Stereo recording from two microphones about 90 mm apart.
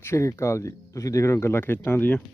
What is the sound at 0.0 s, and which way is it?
Speech, 30° left (ahead or behind).